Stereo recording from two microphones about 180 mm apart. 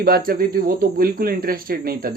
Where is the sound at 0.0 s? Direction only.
55° right (ahead or behind).